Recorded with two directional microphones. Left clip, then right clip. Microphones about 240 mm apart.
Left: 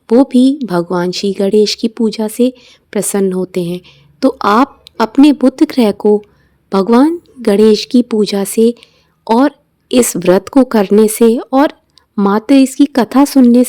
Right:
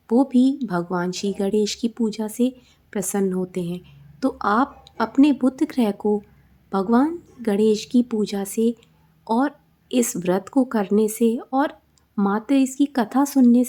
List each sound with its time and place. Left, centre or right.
0.1 s a woman's voice: left